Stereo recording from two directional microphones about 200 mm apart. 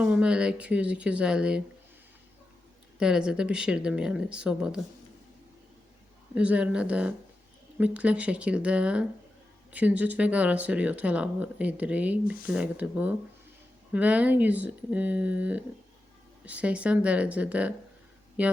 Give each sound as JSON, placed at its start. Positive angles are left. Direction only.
{"t": 0.0, "sound": "speech", "side_deg": -5}
{"t": 3.0, "sound": "speech", "side_deg": -5}
{"t": 6.3, "sound": "speech", "side_deg": -5}